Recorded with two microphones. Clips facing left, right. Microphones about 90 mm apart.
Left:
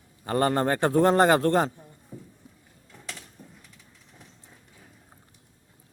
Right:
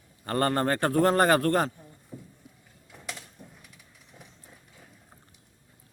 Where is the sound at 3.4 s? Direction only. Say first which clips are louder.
Even; 10° right (ahead or behind).